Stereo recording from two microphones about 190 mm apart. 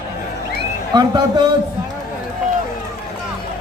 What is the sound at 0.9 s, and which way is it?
Speech, 20° right (ahead or behind).